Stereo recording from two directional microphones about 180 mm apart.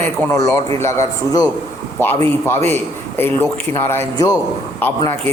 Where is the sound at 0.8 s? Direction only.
15° left (ahead or behind).